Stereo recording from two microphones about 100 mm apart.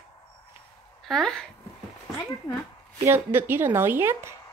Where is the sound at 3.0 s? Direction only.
20° right (ahead or behind).